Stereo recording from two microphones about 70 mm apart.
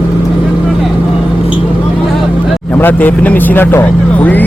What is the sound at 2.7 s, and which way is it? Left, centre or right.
Speech, left.